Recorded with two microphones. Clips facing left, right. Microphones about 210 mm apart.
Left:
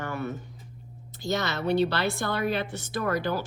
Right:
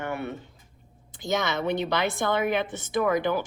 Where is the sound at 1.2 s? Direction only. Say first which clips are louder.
Right 1 dB; 20° right (ahead or behind).